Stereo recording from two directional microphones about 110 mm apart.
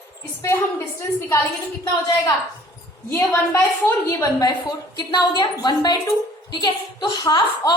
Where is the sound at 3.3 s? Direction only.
25° left (ahead or behind).